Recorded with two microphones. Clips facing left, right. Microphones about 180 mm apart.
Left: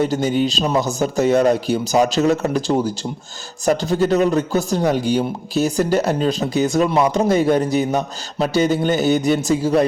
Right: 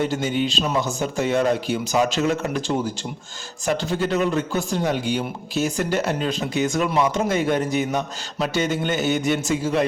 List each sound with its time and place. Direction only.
0.0 s speech: 40° left (ahead or behind)